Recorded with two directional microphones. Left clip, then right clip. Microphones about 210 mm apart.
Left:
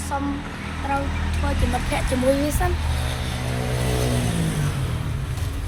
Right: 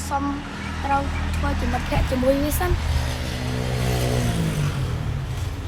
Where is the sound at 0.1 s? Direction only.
5° right (ahead or behind).